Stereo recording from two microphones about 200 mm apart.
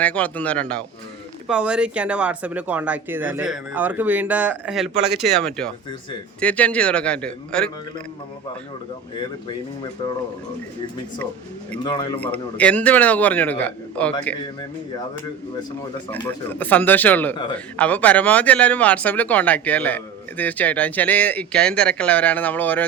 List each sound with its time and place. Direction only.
0.0 s speech: 5° left (ahead or behind)
1.5 s a man's voice: 5° right (ahead or behind)
11.8 s a man's voice: 20° left (ahead or behind)
12.2 s speech: 5° left (ahead or behind)
16.5 s speech: 10° left (ahead or behind)